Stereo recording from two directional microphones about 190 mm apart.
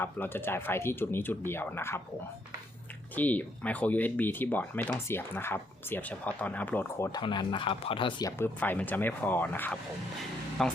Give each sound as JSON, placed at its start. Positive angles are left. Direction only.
{"t": 0.0, "sound": "speech", "side_deg": 10}
{"t": 3.2, "sound": "speech", "side_deg": 10}
{"t": 7.1, "sound": "speech", "side_deg": 25}
{"t": 8.4, "sound": "speech", "side_deg": 10}